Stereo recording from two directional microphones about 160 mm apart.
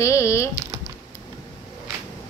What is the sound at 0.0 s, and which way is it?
Typing, 20° left (ahead or behind).